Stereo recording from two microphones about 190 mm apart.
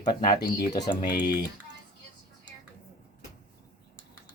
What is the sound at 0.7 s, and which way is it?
Speech, 20° left (ahead or behind).